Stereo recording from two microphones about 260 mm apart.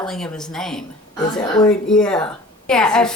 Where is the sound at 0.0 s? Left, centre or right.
Centre.